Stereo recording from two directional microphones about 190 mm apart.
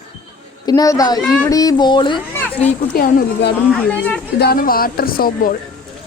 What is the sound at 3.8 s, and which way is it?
Speech, 10° left (ahead or behind).